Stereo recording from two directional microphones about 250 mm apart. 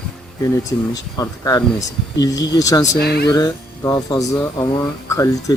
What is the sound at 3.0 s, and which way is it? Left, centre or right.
Speech, left.